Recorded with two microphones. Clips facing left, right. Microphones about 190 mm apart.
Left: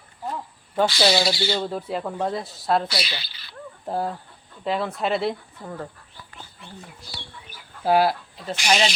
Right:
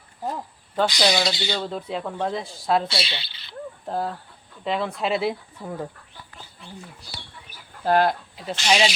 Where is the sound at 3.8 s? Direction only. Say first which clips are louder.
Left 2 dB; 10° left (ahead or behind); by 5.9 s 5° right (ahead or behind).